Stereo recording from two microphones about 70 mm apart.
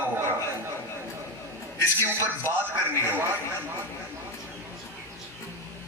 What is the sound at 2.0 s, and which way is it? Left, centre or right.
Speech, right.